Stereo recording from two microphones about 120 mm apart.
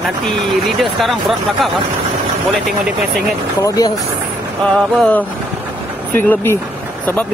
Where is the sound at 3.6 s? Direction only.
30° left (ahead or behind).